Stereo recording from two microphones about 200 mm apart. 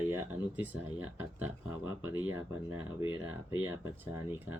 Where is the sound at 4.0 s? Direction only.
10° right (ahead or behind).